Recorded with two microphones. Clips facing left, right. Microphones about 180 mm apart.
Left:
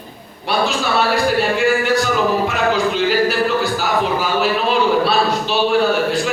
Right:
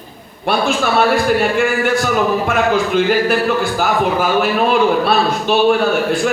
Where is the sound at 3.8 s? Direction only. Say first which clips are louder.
Right 3 dB; 55° right (ahead or behind).